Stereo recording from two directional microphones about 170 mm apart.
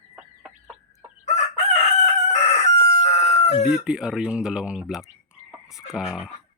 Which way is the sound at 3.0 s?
40° left (ahead or behind).